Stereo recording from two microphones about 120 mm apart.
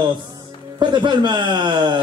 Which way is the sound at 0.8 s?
40° right (ahead or behind).